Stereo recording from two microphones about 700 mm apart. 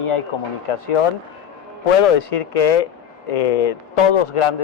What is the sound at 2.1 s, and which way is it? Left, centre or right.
A man's voice, left.